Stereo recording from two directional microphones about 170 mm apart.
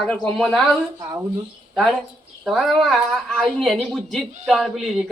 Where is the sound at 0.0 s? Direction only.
Centre (ahead or behind).